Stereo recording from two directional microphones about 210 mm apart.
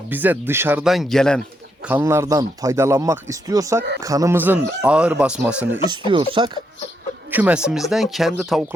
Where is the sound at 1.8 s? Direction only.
10° right (ahead or behind).